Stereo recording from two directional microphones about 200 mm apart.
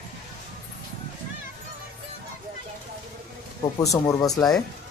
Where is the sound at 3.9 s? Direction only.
15° left (ahead or behind).